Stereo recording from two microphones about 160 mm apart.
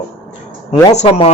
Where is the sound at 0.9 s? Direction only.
40° left (ahead or behind).